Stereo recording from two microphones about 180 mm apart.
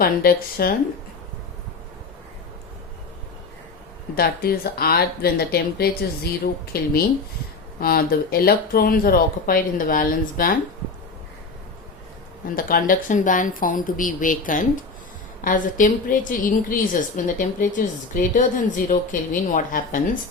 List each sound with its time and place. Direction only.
0.0 s speech: 55° left (ahead or behind)
4.2 s speech: 55° left (ahead or behind)
12.5 s a woman's voice: 50° left (ahead or behind)